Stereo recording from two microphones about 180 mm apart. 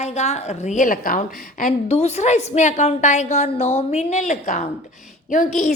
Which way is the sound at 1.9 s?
35° left (ahead or behind).